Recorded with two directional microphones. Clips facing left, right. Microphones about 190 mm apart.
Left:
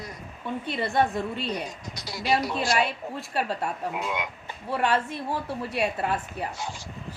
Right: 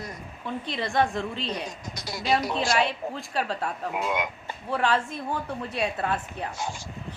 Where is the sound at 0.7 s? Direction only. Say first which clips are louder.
Left 1 dB; 5° left (ahead or behind).